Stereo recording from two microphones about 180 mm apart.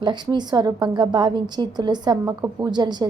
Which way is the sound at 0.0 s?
25° right (ahead or behind).